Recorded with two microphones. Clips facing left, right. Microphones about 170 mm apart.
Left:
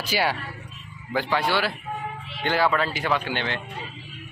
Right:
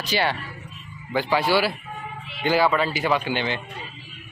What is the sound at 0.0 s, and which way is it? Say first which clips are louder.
Speech: right 1 dB; 5° left (ahead or behind).